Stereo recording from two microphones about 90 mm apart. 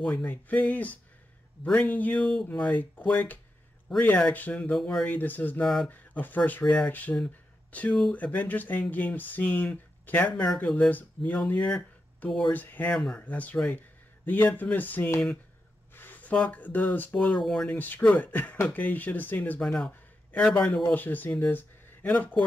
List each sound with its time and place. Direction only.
0.0 s speech: 15° left (ahead or behind)
6.6 s speech: 10° left (ahead or behind)
19.6 s speech: 5° left (ahead or behind)